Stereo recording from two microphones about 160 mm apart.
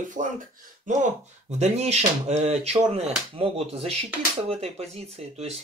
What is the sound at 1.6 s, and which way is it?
Speech, 40° right (ahead or behind).